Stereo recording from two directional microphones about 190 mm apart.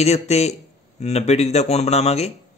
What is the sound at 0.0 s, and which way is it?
Speech, 35° left (ahead or behind).